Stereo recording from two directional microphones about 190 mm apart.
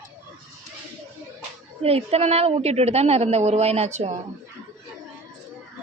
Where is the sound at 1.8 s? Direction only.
30° right (ahead or behind).